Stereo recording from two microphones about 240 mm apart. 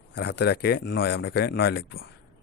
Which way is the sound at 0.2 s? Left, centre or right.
Left.